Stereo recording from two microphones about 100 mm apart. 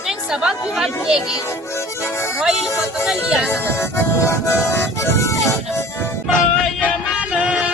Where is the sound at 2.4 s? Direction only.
5° right (ahead or behind).